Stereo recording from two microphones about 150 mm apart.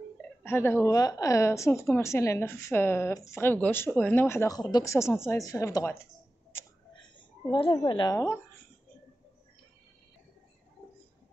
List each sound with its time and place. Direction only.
0.4 s a woman's voice: 15° left (ahead or behind)
7.5 s speech: 30° left (ahead or behind)